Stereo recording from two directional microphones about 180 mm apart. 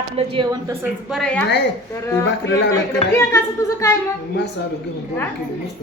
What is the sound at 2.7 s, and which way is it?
A woman's voice, 15° left (ahead or behind).